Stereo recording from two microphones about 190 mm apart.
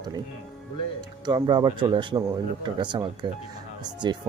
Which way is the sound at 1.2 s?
20° right (ahead or behind).